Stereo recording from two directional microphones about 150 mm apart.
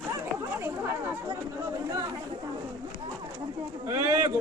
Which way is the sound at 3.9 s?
20° right (ahead or behind).